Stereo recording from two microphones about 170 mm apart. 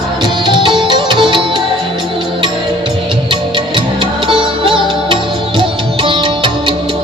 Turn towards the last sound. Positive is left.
turn(degrees=-30)  # may be behind; listen again after turning